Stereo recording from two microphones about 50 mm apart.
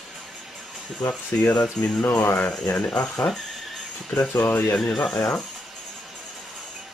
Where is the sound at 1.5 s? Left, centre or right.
Left.